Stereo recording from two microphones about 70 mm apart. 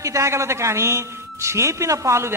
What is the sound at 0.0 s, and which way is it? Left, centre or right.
Speech, right.